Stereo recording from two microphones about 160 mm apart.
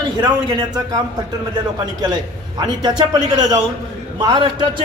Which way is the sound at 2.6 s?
25° right (ahead or behind).